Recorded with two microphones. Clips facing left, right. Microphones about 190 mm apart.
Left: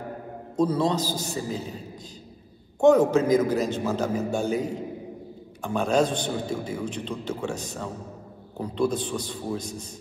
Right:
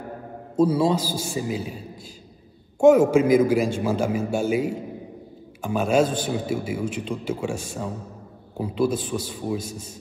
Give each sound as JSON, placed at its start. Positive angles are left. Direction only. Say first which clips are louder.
{"t": 0.6, "sound": "a man's voice", "louder": "right 3 dB", "side_deg": -10}
{"t": 2.8, "sound": "a man's voice", "louder": "right 3 dB", "side_deg": -10}